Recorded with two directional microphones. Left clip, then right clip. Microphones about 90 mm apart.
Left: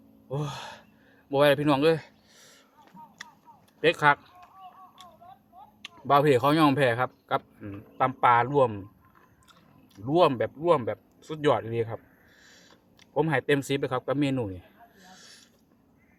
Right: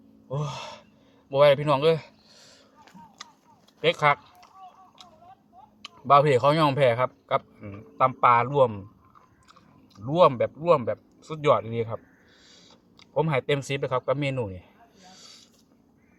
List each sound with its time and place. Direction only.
0.3 s gasp: 40° left (ahead or behind)
1.3 s speech: 40° left (ahead or behind)
3.8 s a sound: 35° left (ahead or behind)
6.1 s speech: 35° left (ahead or behind)
10.1 s speech: 35° left (ahead or behind)
15.0 s a sound: 35° left (ahead or behind)